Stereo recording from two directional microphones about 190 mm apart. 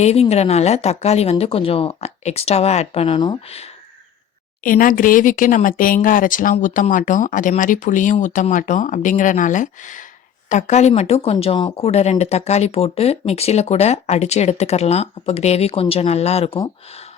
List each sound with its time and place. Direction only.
0.0 s speech: 35° left (ahead or behind)
4.6 s speech: 45° left (ahead or behind)